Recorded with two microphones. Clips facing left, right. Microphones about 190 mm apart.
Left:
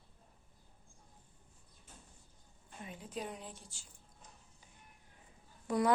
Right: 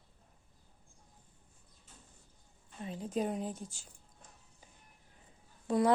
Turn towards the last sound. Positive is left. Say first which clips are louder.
# right 3 dB
turn(degrees=-25)  # may be behind; listen again after turning